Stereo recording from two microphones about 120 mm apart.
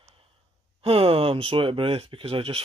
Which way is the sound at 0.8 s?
50° right (ahead or behind).